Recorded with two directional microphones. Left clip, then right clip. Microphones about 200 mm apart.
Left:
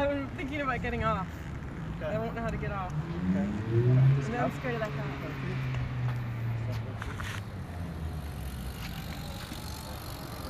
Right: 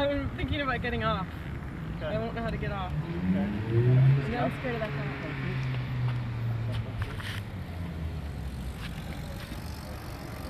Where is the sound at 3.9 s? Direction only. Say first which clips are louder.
Right 1 dB; 50° left (ahead or behind).